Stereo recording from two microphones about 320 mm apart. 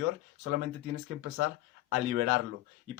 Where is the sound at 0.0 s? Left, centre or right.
Right.